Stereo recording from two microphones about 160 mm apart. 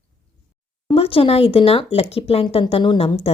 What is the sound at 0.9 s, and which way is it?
Speech, 35° left (ahead or behind).